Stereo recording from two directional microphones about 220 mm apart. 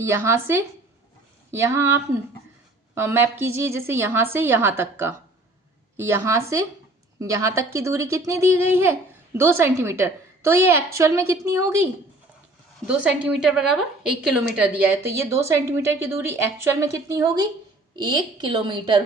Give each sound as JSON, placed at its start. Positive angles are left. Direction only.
{"t": 0.0, "sound": "speech", "side_deg": -10}
{"t": 12.9, "sound": "a woman's voice", "side_deg": -5}